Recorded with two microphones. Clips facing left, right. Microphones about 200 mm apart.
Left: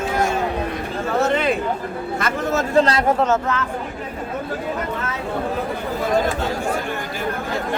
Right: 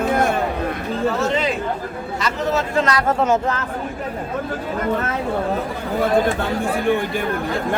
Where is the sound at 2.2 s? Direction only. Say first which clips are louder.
Right 1 dB; 50° left (ahead or behind).